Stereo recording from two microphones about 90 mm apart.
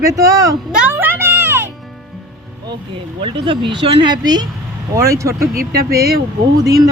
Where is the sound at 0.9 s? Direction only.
25° right (ahead or behind).